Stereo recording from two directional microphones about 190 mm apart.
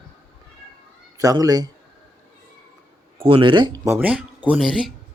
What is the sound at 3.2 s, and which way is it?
Speech, 25° right (ahead or behind).